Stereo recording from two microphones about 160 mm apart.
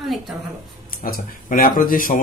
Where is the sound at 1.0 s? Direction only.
65° left (ahead or behind).